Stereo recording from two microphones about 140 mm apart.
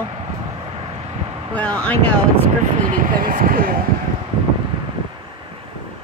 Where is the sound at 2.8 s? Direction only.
75° right (ahead or behind).